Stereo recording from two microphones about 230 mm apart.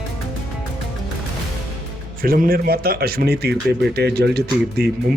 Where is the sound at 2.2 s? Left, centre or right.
Right.